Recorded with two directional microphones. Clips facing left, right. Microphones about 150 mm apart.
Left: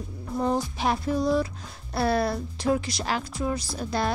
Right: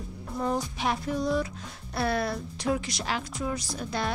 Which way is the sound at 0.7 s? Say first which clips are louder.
Left 3 dB; 35° left (ahead or behind).